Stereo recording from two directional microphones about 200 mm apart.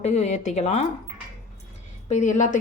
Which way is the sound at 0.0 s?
35° left (ahead or behind).